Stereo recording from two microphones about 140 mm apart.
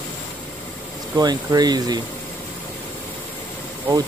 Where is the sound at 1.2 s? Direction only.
30° right (ahead or behind).